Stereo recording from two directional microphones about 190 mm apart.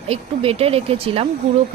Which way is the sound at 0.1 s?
30° right (ahead or behind).